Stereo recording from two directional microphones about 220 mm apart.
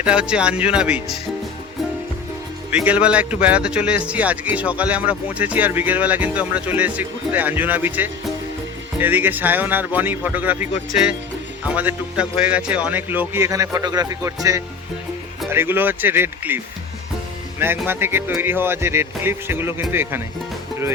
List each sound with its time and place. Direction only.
0.0 s speech: 5° right (ahead or behind)
2.7 s speech: 5° right (ahead or behind)
11.7 s speech: 5° right (ahead or behind)
17.6 s speech: 10° right (ahead or behind)